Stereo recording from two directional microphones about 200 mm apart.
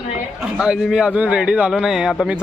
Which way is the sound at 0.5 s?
5° right (ahead or behind).